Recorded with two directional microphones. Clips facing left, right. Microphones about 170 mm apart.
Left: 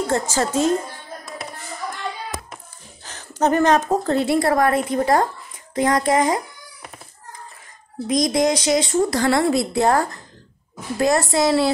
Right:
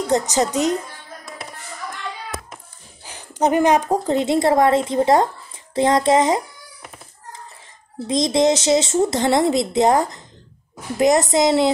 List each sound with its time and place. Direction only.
0.0 s speech: 20° right (ahead or behind)
3.0 s a woman's voice: 10° right (ahead or behind)
8.1 s speech: 25° right (ahead or behind)